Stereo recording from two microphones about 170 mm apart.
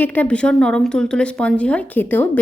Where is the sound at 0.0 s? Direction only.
10° left (ahead or behind).